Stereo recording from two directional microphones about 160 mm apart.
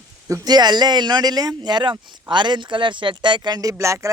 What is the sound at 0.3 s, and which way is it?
A man's voice, 20° right (ahead or behind).